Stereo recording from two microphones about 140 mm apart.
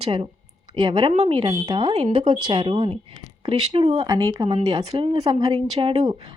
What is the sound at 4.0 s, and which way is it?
A woman's voice, 25° right (ahead or behind).